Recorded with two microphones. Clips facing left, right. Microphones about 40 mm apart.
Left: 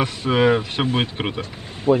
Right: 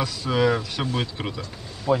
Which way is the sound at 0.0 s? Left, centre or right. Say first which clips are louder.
Left 4 dB; left.